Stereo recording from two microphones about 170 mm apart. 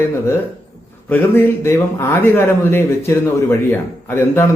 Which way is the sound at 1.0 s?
10° left (ahead or behind).